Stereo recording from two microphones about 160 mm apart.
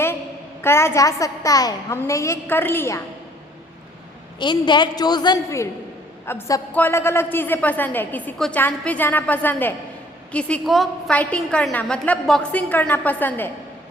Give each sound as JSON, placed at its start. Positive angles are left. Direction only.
{"t": 0.6, "sound": "a woman's voice", "side_deg": 15}
{"t": 4.4, "sound": "a woman's voice", "side_deg": 30}